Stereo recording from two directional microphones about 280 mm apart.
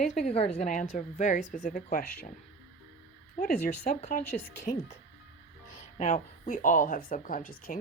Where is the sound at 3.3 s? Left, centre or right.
Left.